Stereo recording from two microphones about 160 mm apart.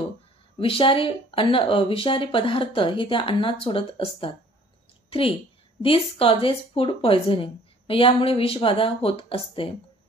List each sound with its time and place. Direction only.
0.6 s a woman's voice: 35° left (ahead or behind)
5.8 s a woman's voice: 35° left (ahead or behind)